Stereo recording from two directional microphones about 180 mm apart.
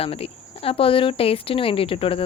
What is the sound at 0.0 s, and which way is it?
Speech, 30° left (ahead or behind).